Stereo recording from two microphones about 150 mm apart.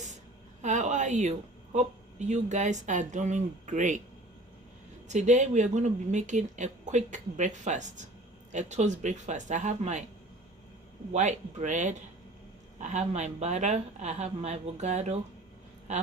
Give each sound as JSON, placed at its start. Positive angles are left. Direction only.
{"t": 0.6, "sound": "a woman's voice", "side_deg": -55}
{"t": 5.0, "sound": "a woman's voice", "side_deg": -50}
{"t": 11.1, "sound": "a woman's voice", "side_deg": -50}